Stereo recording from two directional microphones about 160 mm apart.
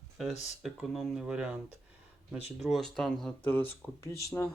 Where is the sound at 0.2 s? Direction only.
Centre (ahead or behind).